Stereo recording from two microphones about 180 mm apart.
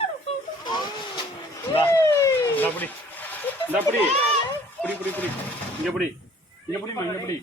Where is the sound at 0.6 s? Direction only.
25° left (ahead or behind).